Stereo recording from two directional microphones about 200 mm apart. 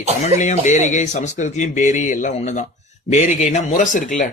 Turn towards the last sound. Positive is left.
turn(degrees=40)  # may be behind; listen again after turning